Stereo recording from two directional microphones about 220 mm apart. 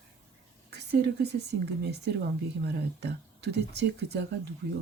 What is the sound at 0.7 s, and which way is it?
Speech, 50° right (ahead or behind).